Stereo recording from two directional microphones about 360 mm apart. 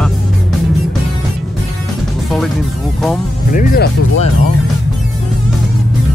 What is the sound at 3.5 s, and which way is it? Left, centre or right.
Speech, left.